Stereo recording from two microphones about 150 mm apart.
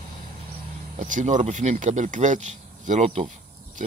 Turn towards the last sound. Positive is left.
turn(degrees=-50)  # may be behind; listen again after turning